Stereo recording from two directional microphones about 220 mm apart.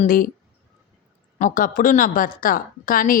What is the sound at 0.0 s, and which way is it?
Speech, 40° left (ahead or behind).